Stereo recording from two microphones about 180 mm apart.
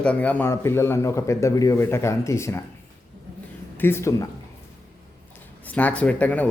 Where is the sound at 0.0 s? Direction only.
5° left (ahead or behind).